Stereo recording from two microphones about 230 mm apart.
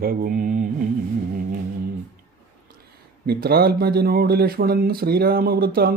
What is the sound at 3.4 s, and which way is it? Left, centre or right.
Speech, right.